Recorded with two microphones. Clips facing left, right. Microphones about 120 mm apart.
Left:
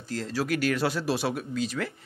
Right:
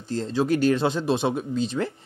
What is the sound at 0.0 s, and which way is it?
Speech, 25° right (ahead or behind).